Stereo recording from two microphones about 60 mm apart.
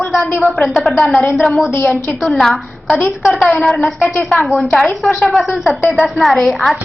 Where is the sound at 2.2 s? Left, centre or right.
Centre.